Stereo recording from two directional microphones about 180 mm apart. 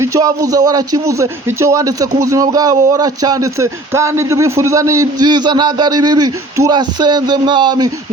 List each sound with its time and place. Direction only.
0.0 s a man's voice: 20° right (ahead or behind)